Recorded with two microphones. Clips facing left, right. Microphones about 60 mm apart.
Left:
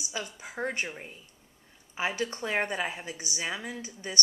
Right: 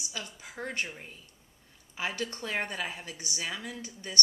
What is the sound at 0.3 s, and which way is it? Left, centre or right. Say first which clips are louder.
A woman's voice: left 3 dB; left.